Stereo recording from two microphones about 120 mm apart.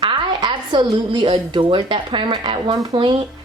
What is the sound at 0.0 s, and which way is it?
A woman's voice, 40° right (ahead or behind).